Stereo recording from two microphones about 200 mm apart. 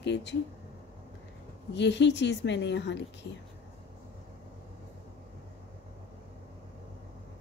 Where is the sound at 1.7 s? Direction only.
60° left (ahead or behind).